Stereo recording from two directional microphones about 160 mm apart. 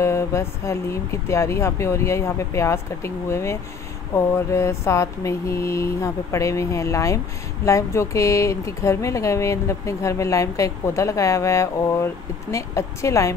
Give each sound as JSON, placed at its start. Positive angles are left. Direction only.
{"t": 0.0, "sound": "speech", "side_deg": 15}